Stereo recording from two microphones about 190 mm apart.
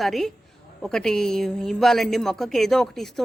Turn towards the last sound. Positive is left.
turn(degrees=0)  # may be behind; listen again after turning